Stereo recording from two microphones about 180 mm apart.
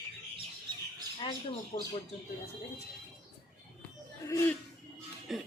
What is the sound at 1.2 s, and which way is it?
Speech, 30° left (ahead or behind).